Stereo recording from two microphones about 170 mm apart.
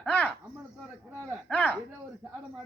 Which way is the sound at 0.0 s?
10° left (ahead or behind).